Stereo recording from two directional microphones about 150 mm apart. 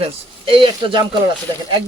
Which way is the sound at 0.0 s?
35° right (ahead or behind).